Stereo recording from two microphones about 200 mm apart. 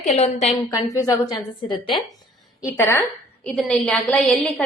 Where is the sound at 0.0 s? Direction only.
35° left (ahead or behind).